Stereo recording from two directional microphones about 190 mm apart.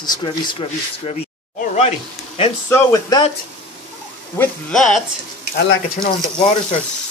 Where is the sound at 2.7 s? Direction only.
20° left (ahead or behind).